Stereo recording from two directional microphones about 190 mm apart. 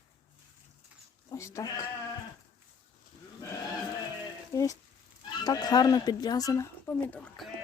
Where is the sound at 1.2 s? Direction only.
15° left (ahead or behind).